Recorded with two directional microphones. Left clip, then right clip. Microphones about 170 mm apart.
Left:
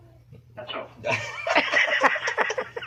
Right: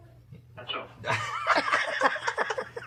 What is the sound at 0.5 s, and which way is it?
Speech, 30° left (ahead or behind).